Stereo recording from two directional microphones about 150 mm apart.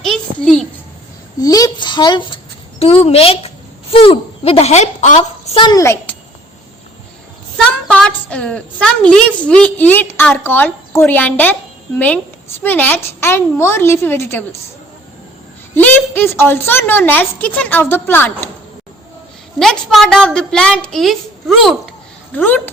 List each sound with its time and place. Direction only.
0.0 s a sound: 5° left (ahead or behind)
1.4 s a child's voice: 25° left (ahead or behind); by 5.5 s 50° left (ahead or behind)
5.5 s a child's voice: 30° left (ahead or behind)
5.8 s a child's voice: 15° left (ahead or behind)
7.5 s a woman's voice: 5° left (ahead or behind)
15.7 s a woman's voice: 15° left (ahead or behind)
19.5 s a woman's voice: centre (ahead or behind)
22.4 s a woman's voice: 10° left (ahead or behind)